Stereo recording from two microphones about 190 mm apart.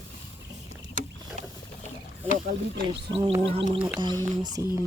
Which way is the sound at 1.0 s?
45° right (ahead or behind).